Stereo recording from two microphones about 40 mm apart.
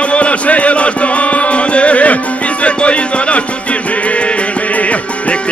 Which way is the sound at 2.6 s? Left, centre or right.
Left.